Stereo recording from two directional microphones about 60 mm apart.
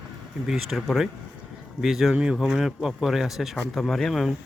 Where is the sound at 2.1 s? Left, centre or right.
Centre.